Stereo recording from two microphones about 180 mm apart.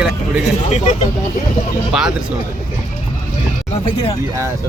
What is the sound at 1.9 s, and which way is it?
Speech, centre (ahead or behind).